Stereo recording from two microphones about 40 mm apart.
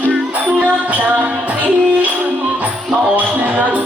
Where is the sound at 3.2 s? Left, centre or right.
Right.